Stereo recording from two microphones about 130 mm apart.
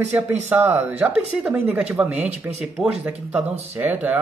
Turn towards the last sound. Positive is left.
turn(degrees=-15)  # may be behind; listen again after turning